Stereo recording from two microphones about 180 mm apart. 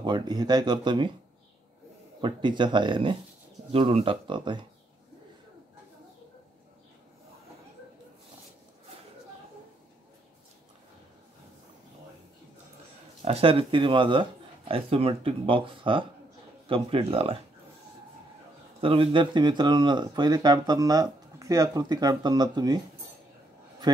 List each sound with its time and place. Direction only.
0.0 s speech: 25° right (ahead or behind)
2.2 s speech: 25° right (ahead or behind)
13.2 s speech: 30° right (ahead or behind)
18.8 s speech: 30° right (ahead or behind)